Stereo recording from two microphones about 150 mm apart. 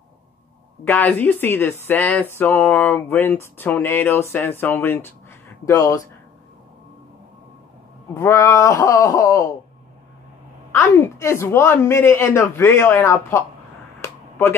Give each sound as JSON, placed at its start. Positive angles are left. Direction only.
{"t": 0.8, "sound": "speech", "side_deg": 10}
{"t": 8.1, "sound": "speech", "side_deg": 20}
{"t": 10.7, "sound": "speech", "side_deg": 20}